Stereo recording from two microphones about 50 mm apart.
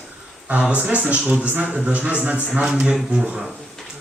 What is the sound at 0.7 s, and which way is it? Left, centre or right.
Speech, right.